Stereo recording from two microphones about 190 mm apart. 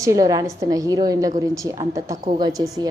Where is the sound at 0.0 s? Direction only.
15° right (ahead or behind).